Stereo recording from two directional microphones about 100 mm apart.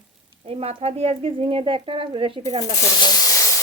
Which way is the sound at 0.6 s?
75° right (ahead or behind).